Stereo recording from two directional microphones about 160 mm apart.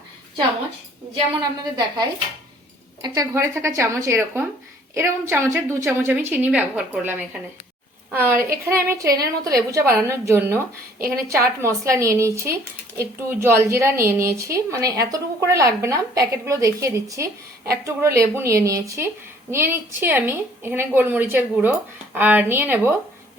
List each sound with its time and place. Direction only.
1.1 s a woman's voice: 25° right (ahead or behind)
11.6 s a woman's voice: 20° right (ahead or behind)